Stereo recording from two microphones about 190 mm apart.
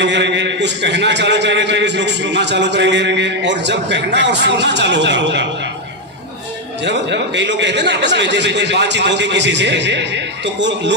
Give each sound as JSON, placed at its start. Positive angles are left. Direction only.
{"t": 0.0, "sound": "a man's voice", "side_deg": -65}
{"t": 6.8, "sound": "a man's voice", "side_deg": -65}